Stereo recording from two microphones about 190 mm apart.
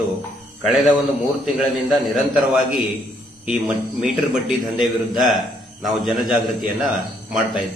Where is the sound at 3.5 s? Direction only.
Centre (ahead or behind).